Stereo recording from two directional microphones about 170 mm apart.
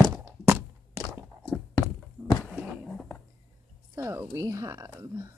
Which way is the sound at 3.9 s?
15° right (ahead or behind).